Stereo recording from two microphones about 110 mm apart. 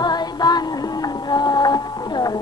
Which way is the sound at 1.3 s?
40° left (ahead or behind).